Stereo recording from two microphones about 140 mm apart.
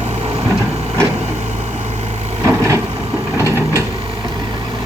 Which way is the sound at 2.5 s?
20° right (ahead or behind).